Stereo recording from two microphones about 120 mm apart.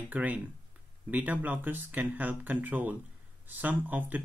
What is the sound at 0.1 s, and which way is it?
Speech, 15° right (ahead or behind).